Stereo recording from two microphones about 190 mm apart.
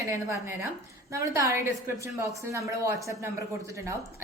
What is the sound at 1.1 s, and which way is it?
A woman's voice, 15° right (ahead or behind).